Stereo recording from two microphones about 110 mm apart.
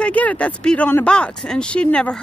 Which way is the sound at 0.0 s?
15° left (ahead or behind).